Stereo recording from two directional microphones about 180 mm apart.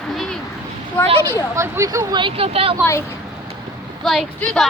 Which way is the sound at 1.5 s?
15° right (ahead or behind).